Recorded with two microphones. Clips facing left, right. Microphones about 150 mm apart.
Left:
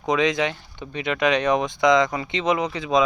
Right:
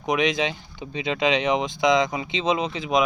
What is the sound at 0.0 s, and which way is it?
Speech, 20° right (ahead or behind).